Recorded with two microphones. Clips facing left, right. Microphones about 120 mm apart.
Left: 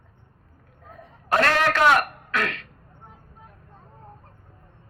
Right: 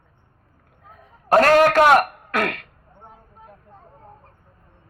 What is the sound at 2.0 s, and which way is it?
Throat clearing, 50° right (ahead or behind).